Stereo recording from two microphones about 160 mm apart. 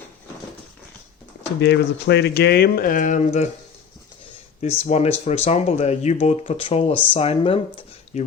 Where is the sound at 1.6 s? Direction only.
90° left; by 3.4 s 45° left (ahead or behind).